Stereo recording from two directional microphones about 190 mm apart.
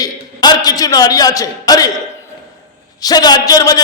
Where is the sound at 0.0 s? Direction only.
20° left (ahead or behind).